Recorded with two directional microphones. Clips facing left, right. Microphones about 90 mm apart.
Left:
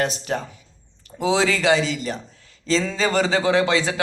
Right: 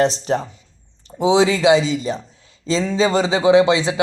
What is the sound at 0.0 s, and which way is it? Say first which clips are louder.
Speech: right 6 dB; 30° right (ahead or behind).